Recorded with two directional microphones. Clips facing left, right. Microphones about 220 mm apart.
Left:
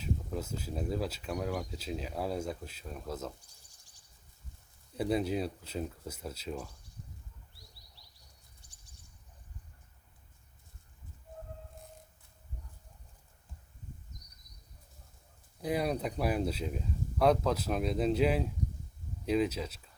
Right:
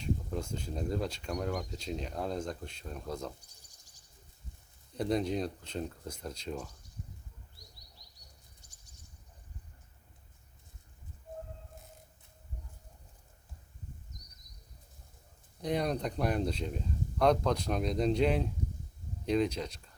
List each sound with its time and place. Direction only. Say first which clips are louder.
0.0 s speech: right 1 dB; 5° left (ahead or behind)
4.9 s speech: even; 5° left (ahead or behind)
8.6 s a sound: right 1 dB; 40° right (ahead or behind)
15.6 s speech: even; 5° left (ahead or behind)